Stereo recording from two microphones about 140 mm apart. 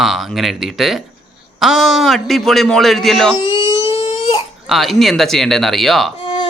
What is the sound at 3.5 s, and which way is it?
Crying, 35° left (ahead or behind).